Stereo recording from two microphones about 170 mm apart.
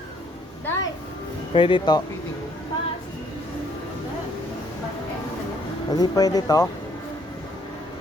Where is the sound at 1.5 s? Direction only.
30° left (ahead or behind).